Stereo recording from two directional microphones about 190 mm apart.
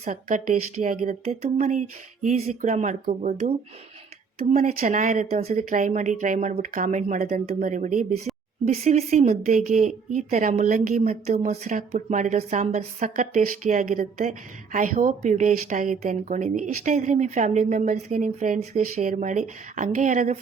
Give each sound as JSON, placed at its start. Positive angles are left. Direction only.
{"t": 0.0, "sound": "speech", "side_deg": -40}